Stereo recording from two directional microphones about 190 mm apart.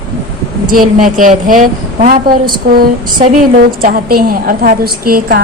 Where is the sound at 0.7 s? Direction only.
45° right (ahead or behind).